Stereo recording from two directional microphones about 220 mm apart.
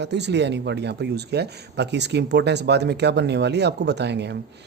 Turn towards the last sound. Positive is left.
turn(degrees=-50)  # may be behind; listen again after turning